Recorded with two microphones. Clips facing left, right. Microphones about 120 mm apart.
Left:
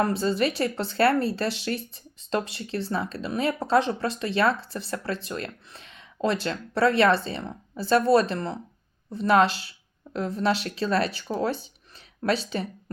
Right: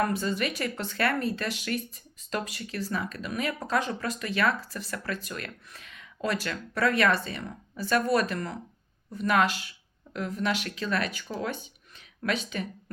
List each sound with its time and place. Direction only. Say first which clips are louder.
0.0 s speech: left 4 dB; 30° left (ahead or behind)